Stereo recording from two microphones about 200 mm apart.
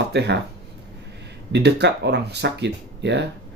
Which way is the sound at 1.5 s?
55° right (ahead or behind).